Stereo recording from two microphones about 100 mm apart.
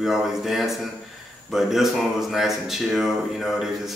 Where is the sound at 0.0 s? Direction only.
Centre (ahead or behind).